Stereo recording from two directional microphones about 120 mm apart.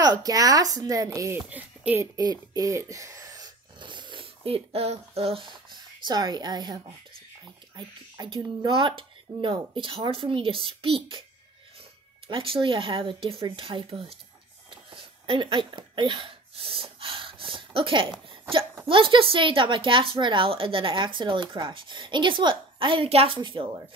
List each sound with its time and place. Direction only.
0.0 s speech: 30° right (ahead or behind)
1.5 s speech: 15° right (ahead or behind)
2.5 s a woman's voice: 25° right (ahead or behind); by 11.2 s 45° right (ahead or behind)
12.3 s a woman's voice: 45° right (ahead or behind)
14.7 s a sound: 45° right (ahead or behind)
18.9 s a woman's voice: 45° right (ahead or behind)